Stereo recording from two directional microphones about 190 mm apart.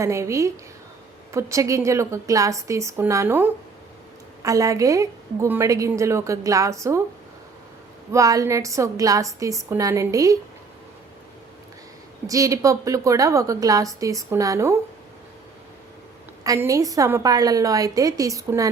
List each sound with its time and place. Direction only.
0.0 s a woman's voice: 15° right (ahead or behind)
8.1 s a woman's voice: 15° right (ahead or behind)
12.3 s a woman's voice: 15° right (ahead or behind)
16.4 s a woman's voice: 15° right (ahead or behind)